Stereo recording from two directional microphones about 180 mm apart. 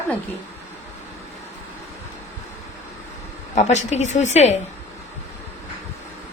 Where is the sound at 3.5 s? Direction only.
40° left (ahead or behind).